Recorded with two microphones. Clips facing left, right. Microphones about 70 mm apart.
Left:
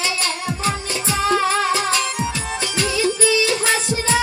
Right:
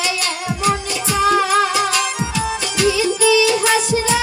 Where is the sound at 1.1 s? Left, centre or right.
Left.